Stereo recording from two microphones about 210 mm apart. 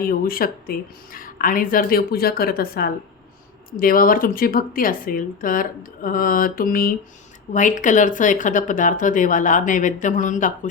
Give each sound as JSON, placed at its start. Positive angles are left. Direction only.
{"t": 0.0, "sound": "speech", "side_deg": 45}